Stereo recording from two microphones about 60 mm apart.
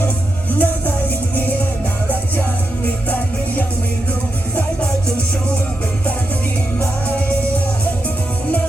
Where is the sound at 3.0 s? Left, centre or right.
Left.